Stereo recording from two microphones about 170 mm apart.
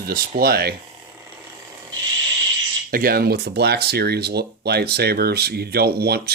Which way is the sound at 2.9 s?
60° right (ahead or behind).